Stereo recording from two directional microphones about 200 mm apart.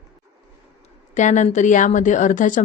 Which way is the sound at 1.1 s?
35° left (ahead or behind).